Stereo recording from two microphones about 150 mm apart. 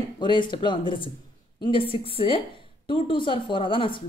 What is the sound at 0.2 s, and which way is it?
A woman's voice, 30° left (ahead or behind).